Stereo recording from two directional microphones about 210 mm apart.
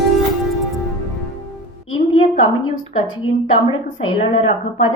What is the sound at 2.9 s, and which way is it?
A woman's voice, 25° left (ahead or behind).